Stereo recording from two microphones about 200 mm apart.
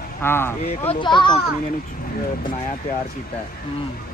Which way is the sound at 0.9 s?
25° left (ahead or behind).